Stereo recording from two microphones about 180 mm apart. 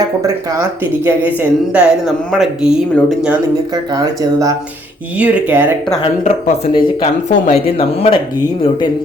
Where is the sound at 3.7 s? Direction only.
20° right (ahead or behind).